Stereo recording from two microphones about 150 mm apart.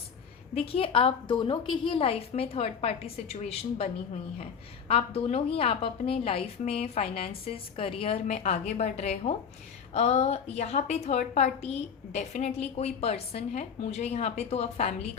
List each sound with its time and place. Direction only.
0.5 s a woman's voice: 40° left (ahead or behind)
4.9 s a woman's voice: 40° left (ahead or behind)